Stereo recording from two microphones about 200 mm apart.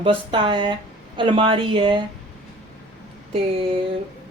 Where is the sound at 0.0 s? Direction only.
25° right (ahead or behind).